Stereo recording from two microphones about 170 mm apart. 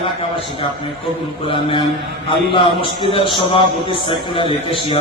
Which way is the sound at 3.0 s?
30° left (ahead or behind).